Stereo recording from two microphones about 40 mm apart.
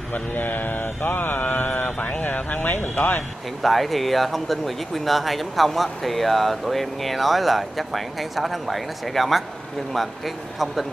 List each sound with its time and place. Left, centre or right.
0.1 s speech: left
2.3 s speech: left
3.0 s speech: left
3.6 s speech: centre